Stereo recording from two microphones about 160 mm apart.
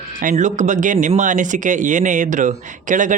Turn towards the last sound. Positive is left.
turn(degrees=-55)  # may be behind; listen again after turning